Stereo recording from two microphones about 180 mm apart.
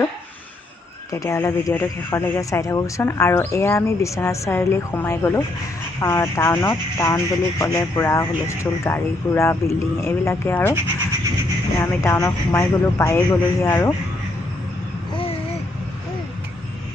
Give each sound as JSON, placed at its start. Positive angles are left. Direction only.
{"t": 1.1, "sound": "speech", "side_deg": 15}
{"t": 11.8, "sound": "speech", "side_deg": 15}